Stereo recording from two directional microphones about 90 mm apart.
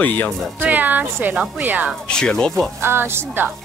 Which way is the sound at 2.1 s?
10° left (ahead or behind).